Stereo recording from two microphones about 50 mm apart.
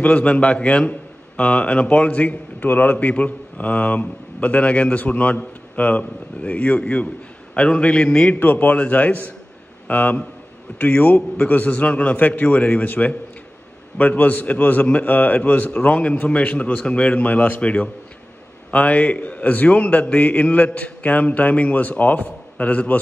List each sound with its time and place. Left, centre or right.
0.0 s a man's voice: left
8.4 s a man's voice: left